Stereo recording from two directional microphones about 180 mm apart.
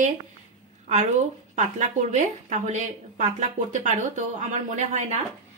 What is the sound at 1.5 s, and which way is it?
A woman's voice, 40° right (ahead or behind).